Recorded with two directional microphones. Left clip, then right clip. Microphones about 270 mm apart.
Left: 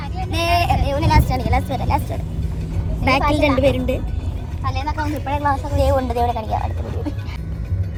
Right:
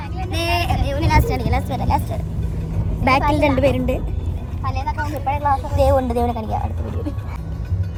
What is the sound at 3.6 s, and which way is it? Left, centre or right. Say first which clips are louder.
Speech: even; centre.